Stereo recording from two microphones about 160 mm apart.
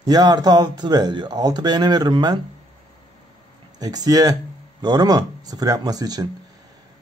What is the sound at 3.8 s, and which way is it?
Speech, 25° right (ahead or behind).